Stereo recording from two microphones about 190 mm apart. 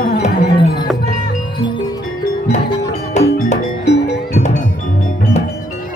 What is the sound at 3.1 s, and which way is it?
Music, 40° left (ahead or behind).